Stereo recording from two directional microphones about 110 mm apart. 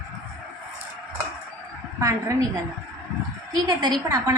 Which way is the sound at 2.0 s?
30° right (ahead or behind).